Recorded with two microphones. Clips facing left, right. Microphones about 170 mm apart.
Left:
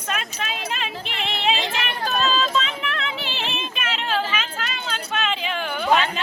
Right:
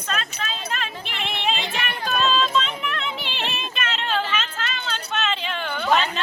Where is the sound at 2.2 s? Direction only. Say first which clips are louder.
Right 2 dB; 5° left (ahead or behind).